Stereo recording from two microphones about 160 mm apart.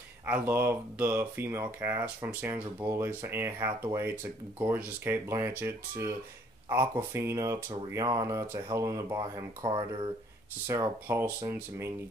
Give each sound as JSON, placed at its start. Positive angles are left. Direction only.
{"t": 0.3, "sound": "speech", "side_deg": -10}
{"t": 9.7, "sound": "speech", "side_deg": -30}
{"t": 10.7, "sound": "speech", "side_deg": -15}